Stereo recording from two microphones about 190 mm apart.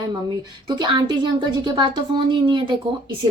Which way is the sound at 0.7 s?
20° right (ahead or behind).